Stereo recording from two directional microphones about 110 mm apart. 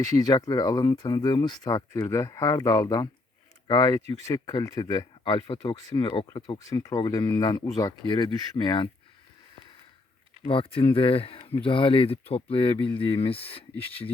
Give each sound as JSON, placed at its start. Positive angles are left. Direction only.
{"t": 0.0, "sound": "speech", "side_deg": 35}
{"t": 5.6, "sound": "speech", "side_deg": 45}
{"t": 6.6, "sound": "speech", "side_deg": 30}
{"t": 10.5, "sound": "speech", "side_deg": 55}